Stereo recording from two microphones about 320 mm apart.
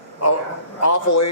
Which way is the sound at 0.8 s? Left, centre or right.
Left.